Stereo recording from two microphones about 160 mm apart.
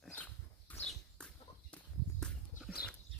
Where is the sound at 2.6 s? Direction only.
5° right (ahead or behind).